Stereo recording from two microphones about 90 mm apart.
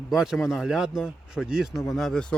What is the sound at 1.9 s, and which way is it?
Speech, 5° left (ahead or behind).